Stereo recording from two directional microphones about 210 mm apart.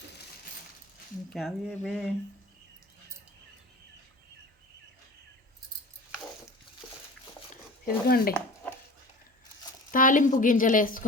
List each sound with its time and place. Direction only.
1.3 s speech: centre (ahead or behind)
7.9 s speech: 45° left (ahead or behind)
9.9 s speech: 40° left (ahead or behind)